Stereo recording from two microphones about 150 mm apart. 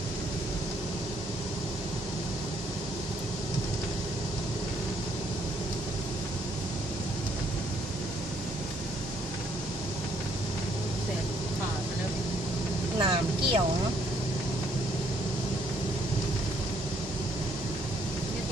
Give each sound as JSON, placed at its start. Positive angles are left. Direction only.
{"t": 13.0, "sound": "vehicle", "side_deg": -35}